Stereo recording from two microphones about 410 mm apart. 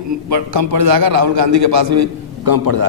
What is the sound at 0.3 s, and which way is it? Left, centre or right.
A man's voice, right.